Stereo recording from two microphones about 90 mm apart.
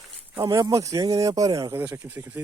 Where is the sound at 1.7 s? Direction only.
25° right (ahead or behind).